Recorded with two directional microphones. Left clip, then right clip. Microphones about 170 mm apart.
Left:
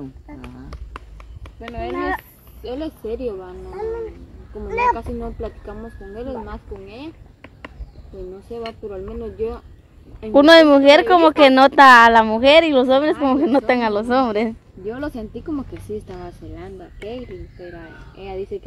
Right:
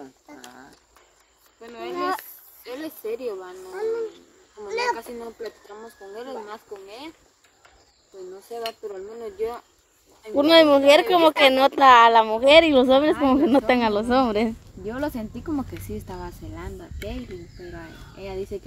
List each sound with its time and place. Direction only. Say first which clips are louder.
1.6 s speech: left 3 dB; 70° right (ahead or behind)
2.6 s speech: left 5 dB; 30° right (ahead or behind)
4.6 s a child's voice: left 7 dB; 20° left (ahead or behind)
6.2 s speech: left 5 dB; 25° right (ahead or behind)
10.3 s speech: left 6 dB; 5° right (ahead or behind)
14.9 s speech: left 1 dB; 20° right (ahead or behind)
17.7 s speech: left 2 dB; 25° right (ahead or behind)